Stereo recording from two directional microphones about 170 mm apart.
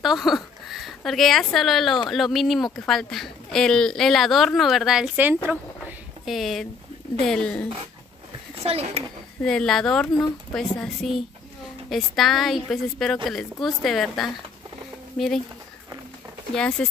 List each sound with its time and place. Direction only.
0.0 s speech: centre (ahead or behind)
6.3 s speech: centre (ahead or behind)
8.6 s speech: 35° right (ahead or behind)
9.4 s speech: 5° left (ahead or behind)
16.5 s speech: 5° left (ahead or behind)